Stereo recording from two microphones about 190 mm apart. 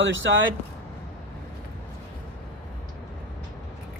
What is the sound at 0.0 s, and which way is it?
Speech, 80° right.